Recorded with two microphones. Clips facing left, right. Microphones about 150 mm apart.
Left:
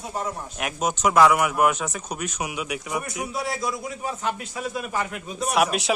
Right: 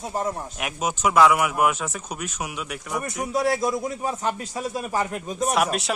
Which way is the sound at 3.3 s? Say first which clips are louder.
Right 7 dB; 45° right (ahead or behind).